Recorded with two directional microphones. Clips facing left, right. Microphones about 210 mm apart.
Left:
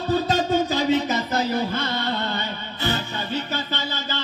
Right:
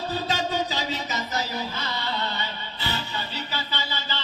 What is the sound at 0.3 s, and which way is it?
Music, 50° left (ahead or behind).